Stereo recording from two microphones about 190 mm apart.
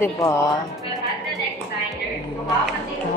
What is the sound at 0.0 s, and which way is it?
Speech, 15° left (ahead or behind).